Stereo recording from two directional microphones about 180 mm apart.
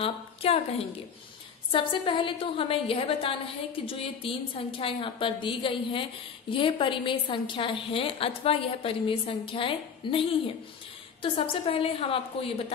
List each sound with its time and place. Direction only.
0.0 s a woman's voice: 35° left (ahead or behind)